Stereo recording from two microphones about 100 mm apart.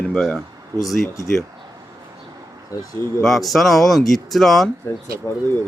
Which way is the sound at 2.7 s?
30° left (ahead or behind).